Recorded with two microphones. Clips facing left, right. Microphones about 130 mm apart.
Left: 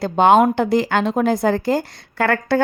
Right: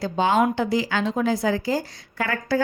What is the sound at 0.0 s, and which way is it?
A woman's voice, 60° left (ahead or behind).